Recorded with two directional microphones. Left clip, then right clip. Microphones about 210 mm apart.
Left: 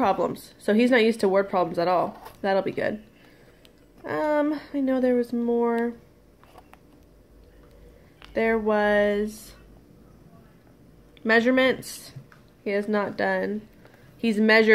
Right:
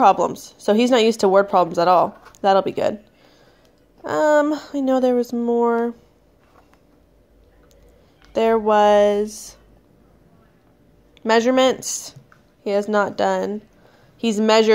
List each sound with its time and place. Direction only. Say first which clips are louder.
0.0 s speech: right 8 dB; 25° right (ahead or behind)
4.0 s speech: right 8 dB; 35° right (ahead or behind)
8.3 s speech: right 6 dB; 30° right (ahead or behind)
11.2 s speech: right 4 dB; 30° right (ahead or behind)